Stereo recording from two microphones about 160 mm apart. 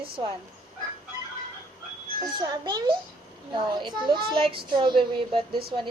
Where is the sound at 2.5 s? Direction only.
25° right (ahead or behind).